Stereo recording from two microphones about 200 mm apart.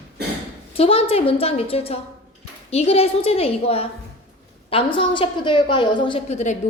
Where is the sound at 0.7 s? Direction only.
30° left (ahead or behind).